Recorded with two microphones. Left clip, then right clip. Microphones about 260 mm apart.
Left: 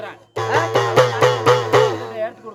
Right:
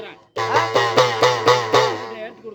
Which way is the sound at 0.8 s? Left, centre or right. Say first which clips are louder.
Left 2 dB; right.